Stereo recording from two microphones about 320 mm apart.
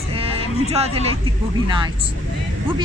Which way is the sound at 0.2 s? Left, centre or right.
Centre.